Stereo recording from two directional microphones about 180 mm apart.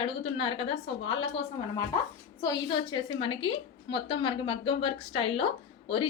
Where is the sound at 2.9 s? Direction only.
25° left (ahead or behind).